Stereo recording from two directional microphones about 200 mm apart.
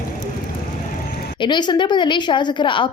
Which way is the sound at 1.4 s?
20° left (ahead or behind).